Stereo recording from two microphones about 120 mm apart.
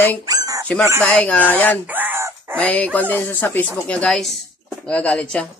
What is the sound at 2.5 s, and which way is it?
Speech, 10° left (ahead or behind).